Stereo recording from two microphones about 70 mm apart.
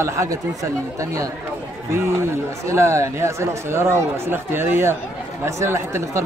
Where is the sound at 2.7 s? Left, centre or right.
Right.